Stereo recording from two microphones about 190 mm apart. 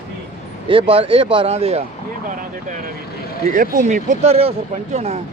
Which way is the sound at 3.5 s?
40° right (ahead or behind).